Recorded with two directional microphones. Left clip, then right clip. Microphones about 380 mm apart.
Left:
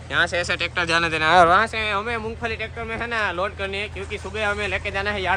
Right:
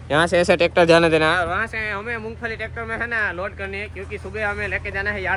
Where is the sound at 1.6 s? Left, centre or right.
Centre.